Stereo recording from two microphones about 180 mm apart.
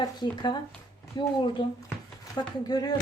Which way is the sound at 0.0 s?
25° left (ahead or behind).